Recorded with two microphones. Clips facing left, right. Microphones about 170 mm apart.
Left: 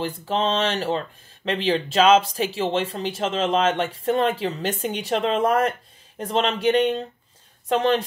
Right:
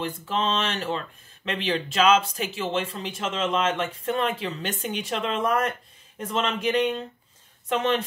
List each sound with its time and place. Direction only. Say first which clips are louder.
0.0 s speech: left 3 dB; 35° left (ahead or behind)